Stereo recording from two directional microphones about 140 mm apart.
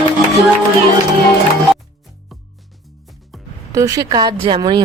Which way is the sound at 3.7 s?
25° right (ahead or behind).